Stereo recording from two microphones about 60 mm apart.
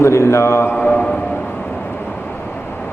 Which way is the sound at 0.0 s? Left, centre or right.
Left.